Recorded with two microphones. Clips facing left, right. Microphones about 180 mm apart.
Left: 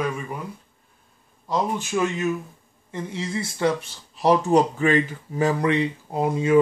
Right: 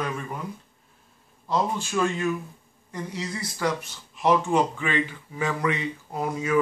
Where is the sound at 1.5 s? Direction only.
20° left (ahead or behind).